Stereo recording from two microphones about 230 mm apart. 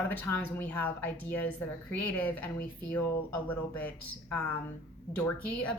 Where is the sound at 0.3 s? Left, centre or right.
Centre.